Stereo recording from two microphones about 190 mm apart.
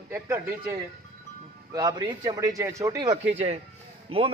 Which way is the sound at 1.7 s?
20° right (ahead or behind).